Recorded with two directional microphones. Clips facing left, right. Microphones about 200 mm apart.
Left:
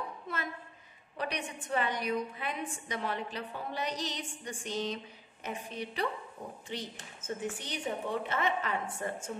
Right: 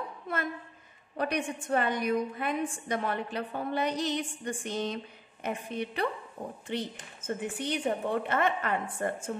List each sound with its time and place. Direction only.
1.1 s a woman's voice: 50° right (ahead or behind)